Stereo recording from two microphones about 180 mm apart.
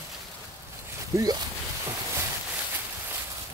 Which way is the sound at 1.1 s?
15° right (ahead or behind).